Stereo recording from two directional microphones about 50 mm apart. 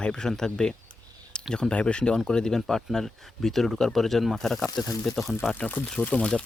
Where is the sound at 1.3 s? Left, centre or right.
Centre.